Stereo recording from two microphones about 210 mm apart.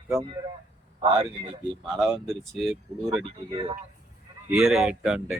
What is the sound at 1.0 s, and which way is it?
Speech, 25° right (ahead or behind).